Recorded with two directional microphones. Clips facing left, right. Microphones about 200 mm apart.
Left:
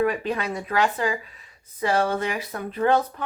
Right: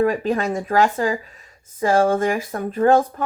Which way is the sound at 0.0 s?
40° right (ahead or behind).